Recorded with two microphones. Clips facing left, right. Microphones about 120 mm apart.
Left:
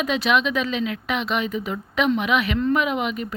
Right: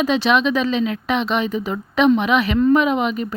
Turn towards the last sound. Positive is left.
turn(degrees=-30)  # may be behind; listen again after turning